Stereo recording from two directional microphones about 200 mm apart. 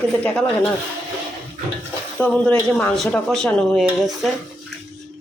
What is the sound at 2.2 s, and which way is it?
Speech, 5° left (ahead or behind).